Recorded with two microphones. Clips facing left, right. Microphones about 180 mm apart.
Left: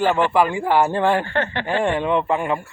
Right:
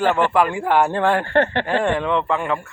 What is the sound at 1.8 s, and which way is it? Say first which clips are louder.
Speech: even; 10° left (ahead or behind).